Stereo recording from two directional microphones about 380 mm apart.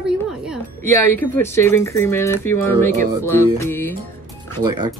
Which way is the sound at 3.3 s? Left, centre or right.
Centre.